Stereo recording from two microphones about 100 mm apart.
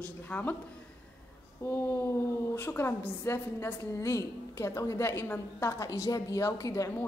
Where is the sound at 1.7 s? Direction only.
25° left (ahead or behind).